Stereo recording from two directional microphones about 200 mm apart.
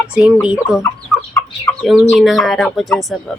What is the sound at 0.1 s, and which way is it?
Speech, 5° right (ahead or behind).